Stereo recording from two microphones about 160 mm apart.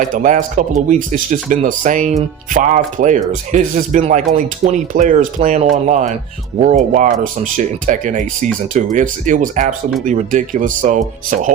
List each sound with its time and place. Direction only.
0.2 s speech: 50° right (ahead or behind)